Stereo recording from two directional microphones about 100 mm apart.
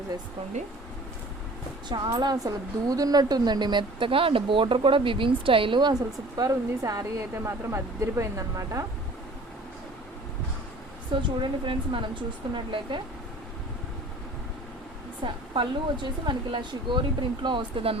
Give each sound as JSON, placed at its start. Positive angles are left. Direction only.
{"t": 1.9, "sound": "a woman's voice", "side_deg": -45}
{"t": 5.9, "sound": "speech", "side_deg": -40}
{"t": 11.1, "sound": "speech", "side_deg": -55}
{"t": 15.2, "sound": "a woman's voice", "side_deg": -55}